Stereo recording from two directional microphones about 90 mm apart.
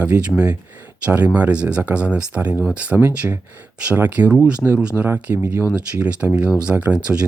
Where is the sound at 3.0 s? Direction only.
30° right (ahead or behind).